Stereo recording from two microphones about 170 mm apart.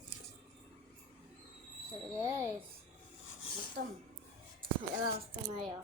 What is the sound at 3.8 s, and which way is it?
Speech, 75° right (ahead or behind).